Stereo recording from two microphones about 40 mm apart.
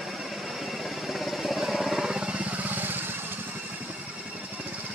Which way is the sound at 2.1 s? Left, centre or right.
Centre.